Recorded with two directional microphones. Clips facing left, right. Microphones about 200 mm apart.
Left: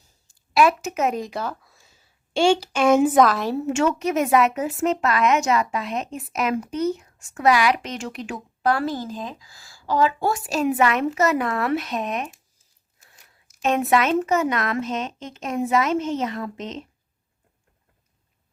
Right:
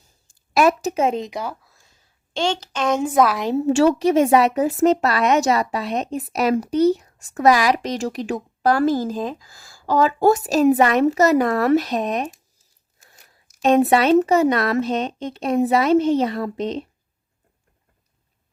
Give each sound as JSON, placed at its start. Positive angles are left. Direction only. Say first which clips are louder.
{"t": 0.5, "sound": "a woman's voice", "louder": "right 2 dB", "side_deg": -40}
{"t": 1.6, "sound": "a sound", "louder": "left 1 dB", "side_deg": 0}
{"t": 3.2, "sound": "a woman's voice", "louder": "right 2 dB", "side_deg": -15}
{"t": 3.7, "sound": "a woman's voice", "louder": "right 7 dB", "side_deg": -35}
{"t": 13.6, "sound": "a woman's voice", "louder": "right 5 dB", "side_deg": -35}